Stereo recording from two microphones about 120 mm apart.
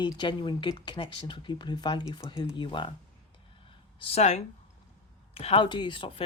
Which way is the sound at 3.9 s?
55° left (ahead or behind).